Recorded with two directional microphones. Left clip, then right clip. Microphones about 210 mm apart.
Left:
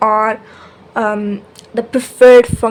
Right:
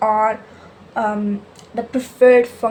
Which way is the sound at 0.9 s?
45° left (ahead or behind).